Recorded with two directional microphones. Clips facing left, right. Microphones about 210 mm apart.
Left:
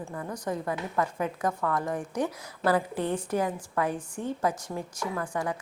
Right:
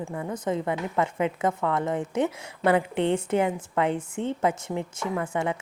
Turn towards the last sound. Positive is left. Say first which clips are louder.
# right 3 dB
turn(degrees=-25)  # may be behind; listen again after turning